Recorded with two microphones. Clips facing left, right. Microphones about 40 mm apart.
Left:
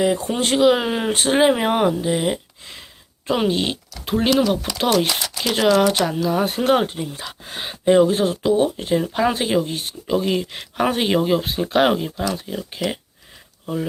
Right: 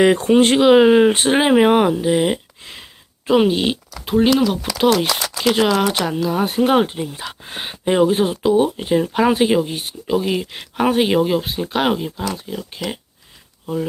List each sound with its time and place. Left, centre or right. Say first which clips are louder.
0.0 s speech: right 7 dB; right; by 13.0 s centre